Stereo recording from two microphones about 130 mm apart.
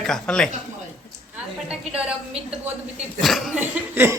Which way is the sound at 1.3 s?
10° right (ahead or behind).